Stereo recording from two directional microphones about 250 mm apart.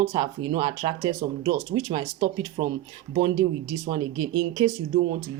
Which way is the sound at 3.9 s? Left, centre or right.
Centre.